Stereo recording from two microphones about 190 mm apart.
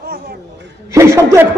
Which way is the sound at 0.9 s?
15° right (ahead or behind).